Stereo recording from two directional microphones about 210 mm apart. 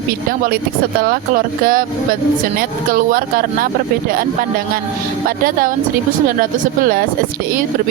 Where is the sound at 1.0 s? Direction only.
45° right (ahead or behind).